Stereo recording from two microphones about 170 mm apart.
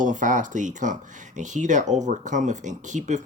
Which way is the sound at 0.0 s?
50° right (ahead or behind).